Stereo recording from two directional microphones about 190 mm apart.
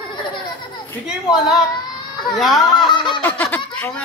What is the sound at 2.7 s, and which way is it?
Giggle, 25° left (ahead or behind).